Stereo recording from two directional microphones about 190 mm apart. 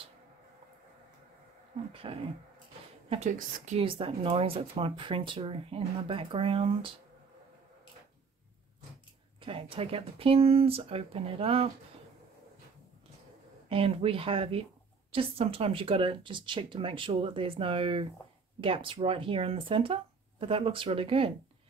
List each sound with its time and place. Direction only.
2.0 s speech: 30° right (ahead or behind)
3.7 s speech: 30° right (ahead or behind)
9.4 s speech: 30° right (ahead or behind)
13.7 s speech: 30° right (ahead or behind)